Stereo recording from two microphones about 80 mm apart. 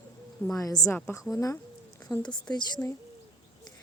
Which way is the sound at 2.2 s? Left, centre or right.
Centre.